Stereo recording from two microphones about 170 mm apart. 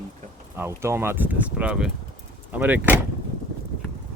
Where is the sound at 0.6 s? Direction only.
15° right (ahead or behind).